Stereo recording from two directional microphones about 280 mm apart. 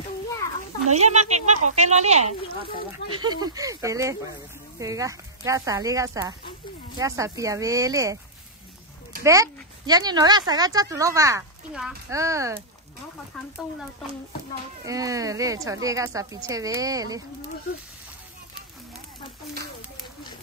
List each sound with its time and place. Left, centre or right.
0.9 s speech: right
9.2 s speech: centre
14.9 s speech: centre